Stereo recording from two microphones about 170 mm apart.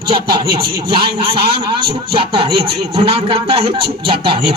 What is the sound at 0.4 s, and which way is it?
A man's voice, 65° right (ahead or behind).